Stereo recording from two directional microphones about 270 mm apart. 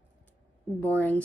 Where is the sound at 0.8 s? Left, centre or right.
Centre.